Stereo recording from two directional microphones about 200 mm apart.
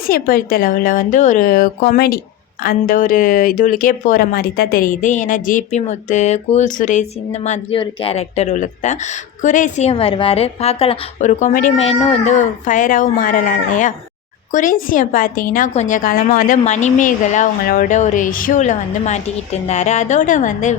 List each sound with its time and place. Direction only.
0.1 s a woman's voice: 45° left (ahead or behind)